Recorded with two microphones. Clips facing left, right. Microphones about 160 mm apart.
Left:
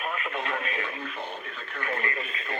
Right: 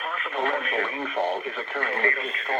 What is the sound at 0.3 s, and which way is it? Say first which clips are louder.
Speech: right 5 dB; 60° right (ahead or behind).